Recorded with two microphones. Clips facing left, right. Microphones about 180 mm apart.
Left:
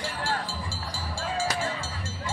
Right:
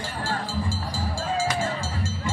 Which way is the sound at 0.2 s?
75° left (ahead or behind).